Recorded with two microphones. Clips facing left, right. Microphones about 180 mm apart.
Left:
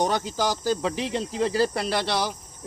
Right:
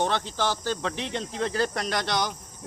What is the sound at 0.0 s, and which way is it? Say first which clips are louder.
Speech: left 2 dB; 10° left (ahead or behind).